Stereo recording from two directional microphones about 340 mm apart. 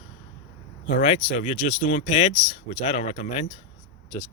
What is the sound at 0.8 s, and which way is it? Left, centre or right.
Speech, centre.